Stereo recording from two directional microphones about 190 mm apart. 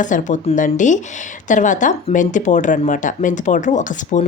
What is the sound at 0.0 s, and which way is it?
Speech, 40° left (ahead or behind).